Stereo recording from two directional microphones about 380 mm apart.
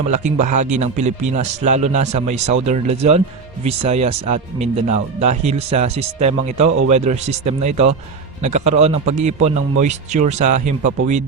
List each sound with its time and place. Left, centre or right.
0.1 s speech: centre